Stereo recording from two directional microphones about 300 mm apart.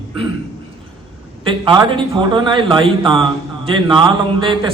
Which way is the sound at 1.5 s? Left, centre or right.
Centre.